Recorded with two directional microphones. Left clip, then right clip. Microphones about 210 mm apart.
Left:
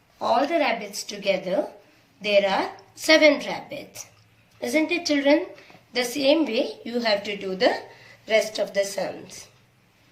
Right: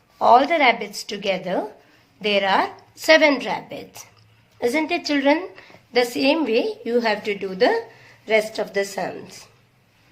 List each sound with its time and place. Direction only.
0.2 s a woman's voice: 45° right (ahead or behind)